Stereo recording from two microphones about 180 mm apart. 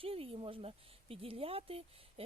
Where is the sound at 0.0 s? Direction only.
30° right (ahead or behind).